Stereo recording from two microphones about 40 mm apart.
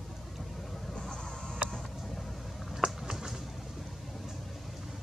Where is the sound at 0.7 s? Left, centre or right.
Centre.